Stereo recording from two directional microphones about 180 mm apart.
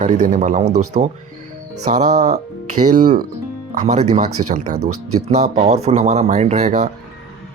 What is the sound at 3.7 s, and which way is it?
Speech, 40° right (ahead or behind).